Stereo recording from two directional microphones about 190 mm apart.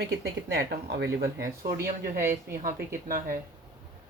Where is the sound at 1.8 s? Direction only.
15° right (ahead or behind).